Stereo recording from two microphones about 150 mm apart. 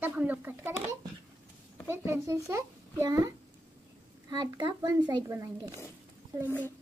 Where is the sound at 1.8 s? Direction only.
15° right (ahead or behind).